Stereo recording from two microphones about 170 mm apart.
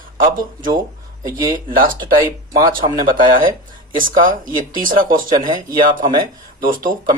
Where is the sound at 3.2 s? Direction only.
55° right (ahead or behind).